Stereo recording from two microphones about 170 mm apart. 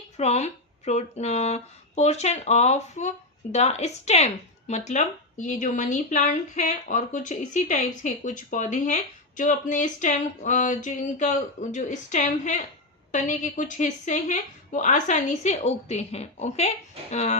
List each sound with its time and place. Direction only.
0.2 s speech: 40° left (ahead or behind)